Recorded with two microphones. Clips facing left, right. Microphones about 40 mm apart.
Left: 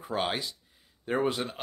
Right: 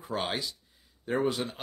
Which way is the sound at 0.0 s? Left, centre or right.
Centre.